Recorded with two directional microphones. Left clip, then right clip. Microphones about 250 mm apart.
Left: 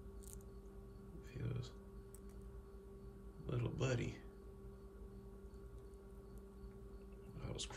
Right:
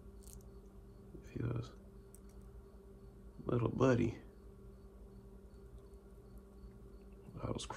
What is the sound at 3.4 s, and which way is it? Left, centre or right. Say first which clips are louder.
Speech: right 10 dB; centre.